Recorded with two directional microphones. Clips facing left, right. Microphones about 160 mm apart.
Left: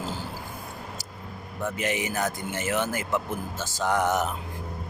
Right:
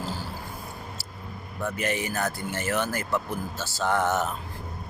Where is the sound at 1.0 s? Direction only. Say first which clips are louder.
Left 1 dB; 15° left (ahead or behind).